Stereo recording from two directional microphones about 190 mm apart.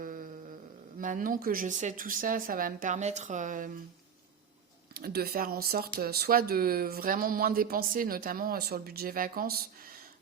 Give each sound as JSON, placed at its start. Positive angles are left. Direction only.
{"t": 0.0, "sound": "a sound", "side_deg": -45}
{"t": 0.9, "sound": "speech", "side_deg": -45}
{"t": 4.9, "sound": "speech", "side_deg": -55}